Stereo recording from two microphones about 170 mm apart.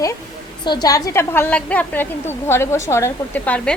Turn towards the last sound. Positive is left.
turn(degrees=10)  # may be behind; listen again after turning